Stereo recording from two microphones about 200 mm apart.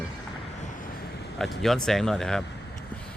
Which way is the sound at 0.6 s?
40° left (ahead or behind).